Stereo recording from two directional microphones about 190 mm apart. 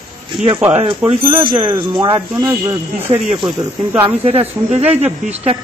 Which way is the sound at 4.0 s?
30° right (ahead or behind).